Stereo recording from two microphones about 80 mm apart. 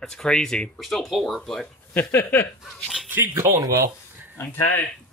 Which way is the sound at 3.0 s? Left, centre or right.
Right.